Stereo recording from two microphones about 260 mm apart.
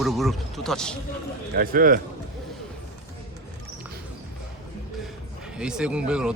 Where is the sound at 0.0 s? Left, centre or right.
Centre.